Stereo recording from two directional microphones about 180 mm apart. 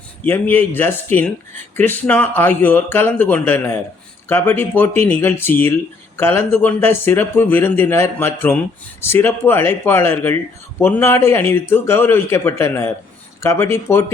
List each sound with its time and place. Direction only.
0.3 s speech: 10° left (ahead or behind)